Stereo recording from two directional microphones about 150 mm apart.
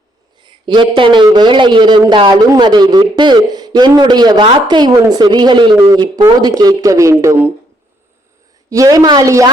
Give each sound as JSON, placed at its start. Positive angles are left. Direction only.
{"t": 0.3, "sound": "a man's voice", "side_deg": -30}
{"t": 8.7, "sound": "speech", "side_deg": -20}